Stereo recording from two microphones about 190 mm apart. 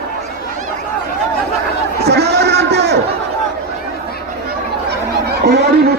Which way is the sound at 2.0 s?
60° right (ahead or behind).